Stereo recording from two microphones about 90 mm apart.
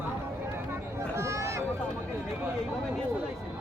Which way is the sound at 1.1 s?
30° right (ahead or behind).